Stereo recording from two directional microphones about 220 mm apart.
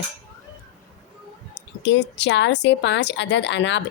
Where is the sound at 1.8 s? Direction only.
55° left (ahead or behind).